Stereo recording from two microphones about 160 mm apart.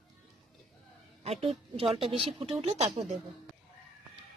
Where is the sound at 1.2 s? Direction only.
40° right (ahead or behind).